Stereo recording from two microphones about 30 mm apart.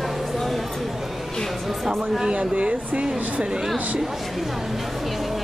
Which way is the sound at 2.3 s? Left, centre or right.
Right.